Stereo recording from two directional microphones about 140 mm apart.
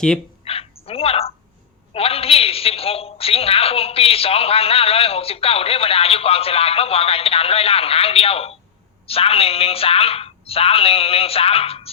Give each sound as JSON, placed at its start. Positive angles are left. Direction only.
{"t": 0.4, "sound": "bow-wow", "side_deg": 45}
{"t": 1.9, "sound": "a woman's voice", "side_deg": 45}